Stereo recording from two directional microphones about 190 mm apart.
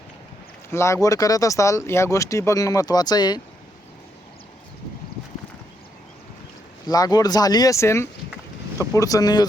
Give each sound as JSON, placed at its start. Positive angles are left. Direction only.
{"t": 0.7, "sound": "speech", "side_deg": 15}
{"t": 6.8, "sound": "speech", "side_deg": 20}